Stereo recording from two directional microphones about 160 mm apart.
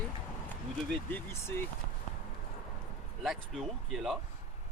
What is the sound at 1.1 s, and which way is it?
Speech, 15° left (ahead or behind).